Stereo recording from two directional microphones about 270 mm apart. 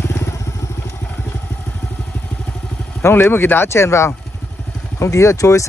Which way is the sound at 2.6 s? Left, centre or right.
Centre.